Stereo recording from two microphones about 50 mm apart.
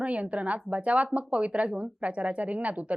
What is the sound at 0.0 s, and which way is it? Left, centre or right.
Speech, right.